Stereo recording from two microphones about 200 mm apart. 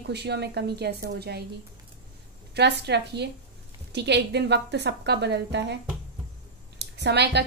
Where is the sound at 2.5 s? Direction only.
55° right (ahead or behind).